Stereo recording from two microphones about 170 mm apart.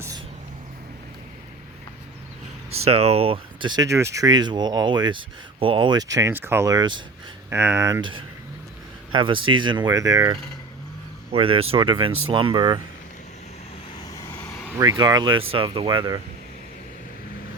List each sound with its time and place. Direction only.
2.6 s speech: 35° right (ahead or behind)
7.5 s speech: 15° right (ahead or behind)
9.1 s speech: 30° right (ahead or behind)
14.1 s vehicle: 10° left (ahead or behind)
14.8 s speech: 25° right (ahead or behind)